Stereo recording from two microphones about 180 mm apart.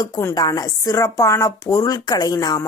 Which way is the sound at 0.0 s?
15° left (ahead or behind).